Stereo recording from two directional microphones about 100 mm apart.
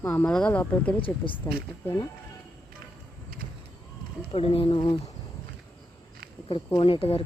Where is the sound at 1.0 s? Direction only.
60° left (ahead or behind).